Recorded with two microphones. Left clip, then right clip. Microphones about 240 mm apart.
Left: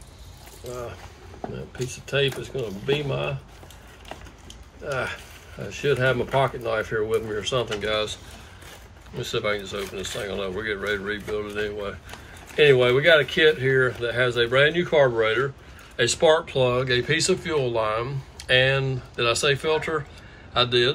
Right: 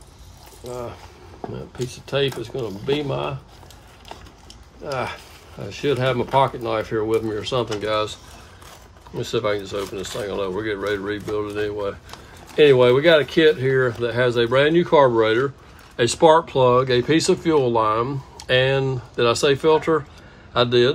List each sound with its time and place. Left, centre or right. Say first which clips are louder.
1.8 s speech: right 2 dB; right
5.7 s speech: right 1 dB; right
9.3 s speech: right 3 dB; right